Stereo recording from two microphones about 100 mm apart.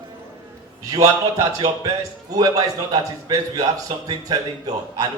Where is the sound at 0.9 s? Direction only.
40° right (ahead or behind).